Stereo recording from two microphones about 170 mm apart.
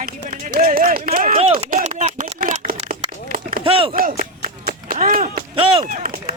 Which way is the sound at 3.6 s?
30° right (ahead or behind).